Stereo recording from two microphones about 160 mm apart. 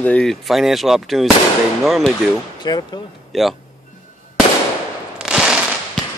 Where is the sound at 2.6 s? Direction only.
25° left (ahead or behind).